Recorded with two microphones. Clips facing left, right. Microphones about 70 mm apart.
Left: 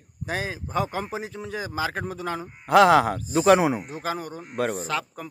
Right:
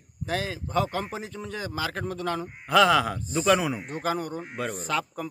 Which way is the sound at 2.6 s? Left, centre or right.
Left.